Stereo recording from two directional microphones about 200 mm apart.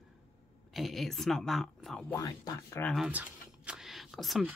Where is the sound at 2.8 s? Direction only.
Centre (ahead or behind).